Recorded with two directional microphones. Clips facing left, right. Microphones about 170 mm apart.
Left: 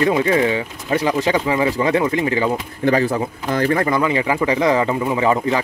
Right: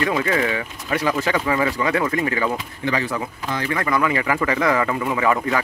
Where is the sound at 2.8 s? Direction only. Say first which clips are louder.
Left 7 dB; 45° left (ahead or behind); by 5.6 s 25° left (ahead or behind).